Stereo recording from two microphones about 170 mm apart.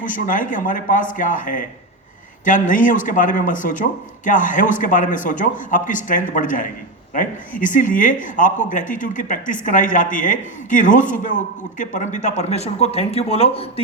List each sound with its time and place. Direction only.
0.0 s speech: 50° left (ahead or behind); by 13.8 s 35° left (ahead or behind)